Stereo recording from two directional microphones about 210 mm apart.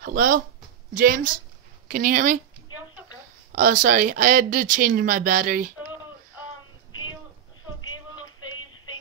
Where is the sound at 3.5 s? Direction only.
40° right (ahead or behind).